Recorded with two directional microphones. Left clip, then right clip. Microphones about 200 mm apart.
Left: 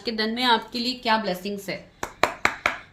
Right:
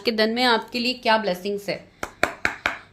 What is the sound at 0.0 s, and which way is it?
A woman's voice, 55° right (ahead or behind).